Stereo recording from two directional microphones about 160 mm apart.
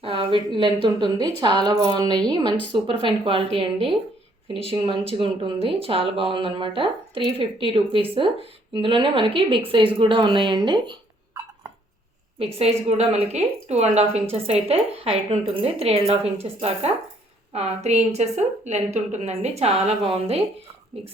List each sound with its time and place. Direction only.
0.0 s speech: 35° right (ahead or behind)
13.0 s a woman's voice: 40° right (ahead or behind)